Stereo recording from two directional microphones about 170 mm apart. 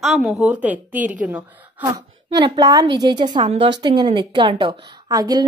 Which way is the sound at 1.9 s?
25° right (ahead or behind).